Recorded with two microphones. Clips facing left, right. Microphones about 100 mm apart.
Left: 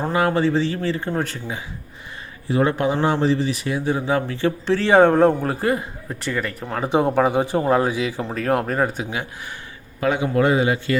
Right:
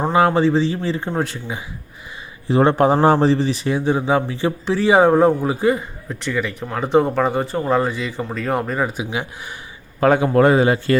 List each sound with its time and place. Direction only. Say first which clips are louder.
0.0 s speech: right 4 dB; 25° right (ahead or behind)
2.5 s speech: right 5 dB; 30° right (ahead or behind); by 9.0 s 5° right (ahead or behind)
10.0 s a man's voice: right 5 dB; 45° right (ahead or behind)